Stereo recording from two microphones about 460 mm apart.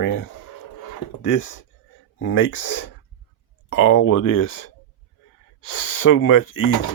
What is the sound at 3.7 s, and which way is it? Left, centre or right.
Speech, left.